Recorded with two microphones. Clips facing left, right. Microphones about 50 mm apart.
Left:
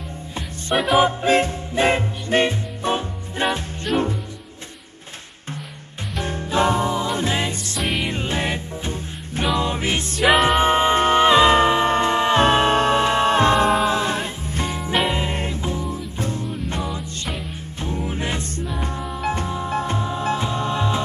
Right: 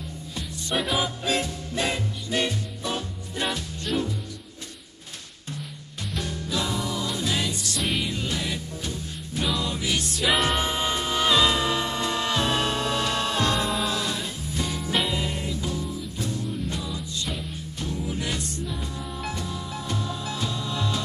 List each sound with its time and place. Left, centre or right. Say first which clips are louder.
0.7 s music: left 9 dB; centre
1.0 s music: left 9 dB; left
6.2 s music: left 10 dB; left
7.8 s music: left 4 dB; centre
8.1 s music: left 5 dB; left
17.9 s music: left 4 dB; left